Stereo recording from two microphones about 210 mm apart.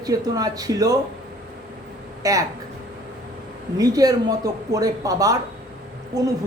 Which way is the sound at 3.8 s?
15° right (ahead or behind).